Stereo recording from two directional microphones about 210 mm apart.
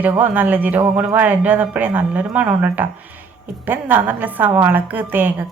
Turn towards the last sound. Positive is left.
turn(degrees=-10)  # may be behind; listen again after turning